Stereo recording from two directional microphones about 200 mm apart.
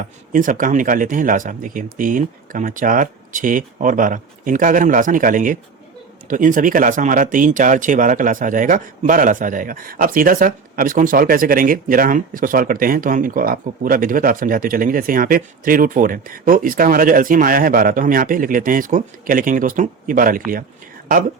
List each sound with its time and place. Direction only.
0.3 s speech: 40° right (ahead or behind)